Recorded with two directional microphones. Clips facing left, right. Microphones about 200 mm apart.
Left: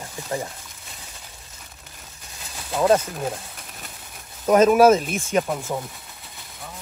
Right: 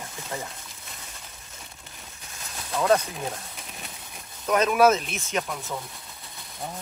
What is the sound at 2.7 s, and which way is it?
Speech, 30° left (ahead or behind).